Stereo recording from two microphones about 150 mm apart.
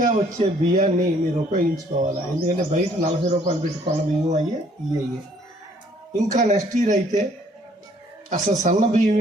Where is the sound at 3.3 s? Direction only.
45° right (ahead or behind).